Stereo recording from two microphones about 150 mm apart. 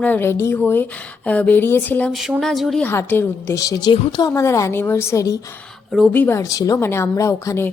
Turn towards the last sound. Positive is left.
turn(degrees=15)  # may be behind; listen again after turning